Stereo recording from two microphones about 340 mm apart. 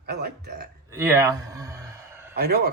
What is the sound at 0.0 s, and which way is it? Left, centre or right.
Speech, right.